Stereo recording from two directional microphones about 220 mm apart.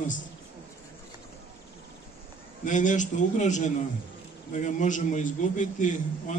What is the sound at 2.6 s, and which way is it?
A man's voice, 35° left (ahead or behind).